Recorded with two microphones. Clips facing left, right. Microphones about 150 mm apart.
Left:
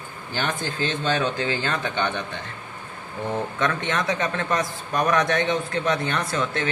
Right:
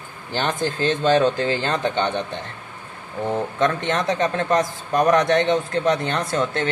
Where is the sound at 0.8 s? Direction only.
40° right (ahead or behind).